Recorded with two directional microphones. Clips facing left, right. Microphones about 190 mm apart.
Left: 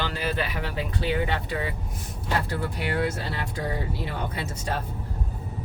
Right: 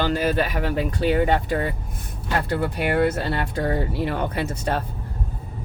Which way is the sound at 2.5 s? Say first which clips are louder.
Right 6 dB; 60° right (ahead or behind).